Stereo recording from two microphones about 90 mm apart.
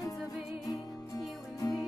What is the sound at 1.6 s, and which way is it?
Music, 40° left (ahead or behind).